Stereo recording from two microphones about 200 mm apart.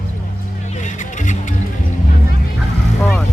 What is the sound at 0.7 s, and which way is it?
Music, 35° left (ahead or behind).